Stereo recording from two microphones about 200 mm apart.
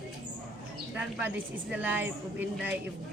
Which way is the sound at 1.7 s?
10° right (ahead or behind).